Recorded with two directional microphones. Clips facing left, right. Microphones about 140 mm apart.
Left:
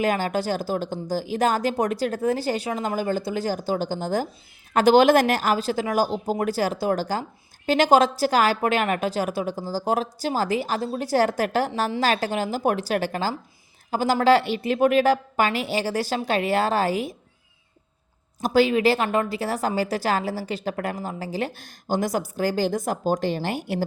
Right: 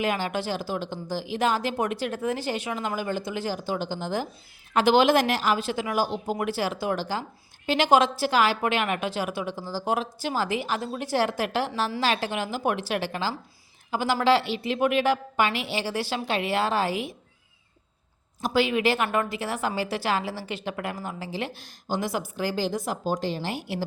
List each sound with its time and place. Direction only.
0.0 s a woman's voice: 40° left (ahead or behind)
18.4 s a woman's voice: 40° left (ahead or behind)